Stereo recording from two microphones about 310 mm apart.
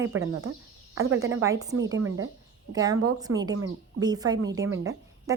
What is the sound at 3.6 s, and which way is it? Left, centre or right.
Speech, right.